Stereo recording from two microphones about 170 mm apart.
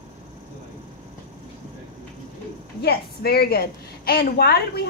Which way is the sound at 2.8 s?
65° left (ahead or behind).